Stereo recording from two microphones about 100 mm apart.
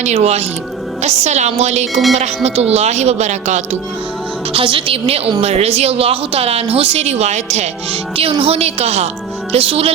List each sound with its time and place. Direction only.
0.1 s a woman's voice: 90° right
4.5 s a woman's voice: 60° right (ahead or behind); by 7.7 s 90° right
8.1 s speech: 70° right (ahead or behind); by 9.0 s 90° right
9.5 s a woman's voice: 75° right (ahead or behind)